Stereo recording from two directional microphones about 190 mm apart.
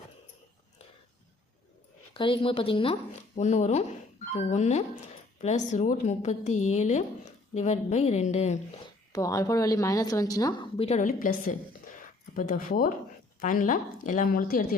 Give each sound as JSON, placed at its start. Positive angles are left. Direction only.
{"t": 2.1, "sound": "speech", "side_deg": 25}
{"t": 9.1, "sound": "a woman's voice", "side_deg": 20}
{"t": 10.8, "sound": "a woman's voice", "side_deg": 35}